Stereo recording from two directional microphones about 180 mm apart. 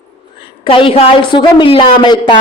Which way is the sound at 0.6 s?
30° left (ahead or behind).